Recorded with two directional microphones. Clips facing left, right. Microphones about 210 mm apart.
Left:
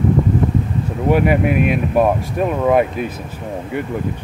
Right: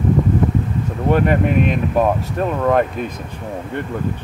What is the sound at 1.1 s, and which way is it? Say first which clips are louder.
Speech: left 1 dB; 10° left (ahead or behind).